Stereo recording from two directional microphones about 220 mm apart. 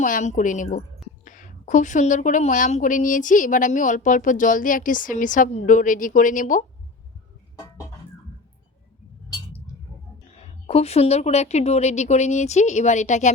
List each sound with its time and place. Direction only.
0.0 s a woman's voice: 35° left (ahead or behind)
10.3 s a woman's voice: 30° left (ahead or behind)